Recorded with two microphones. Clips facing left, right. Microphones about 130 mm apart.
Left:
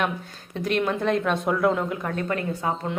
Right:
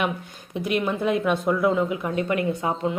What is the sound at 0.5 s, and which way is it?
A woman's voice, 10° right (ahead or behind).